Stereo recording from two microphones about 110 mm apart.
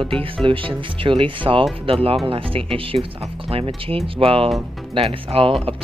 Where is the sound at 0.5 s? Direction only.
50° right (ahead or behind).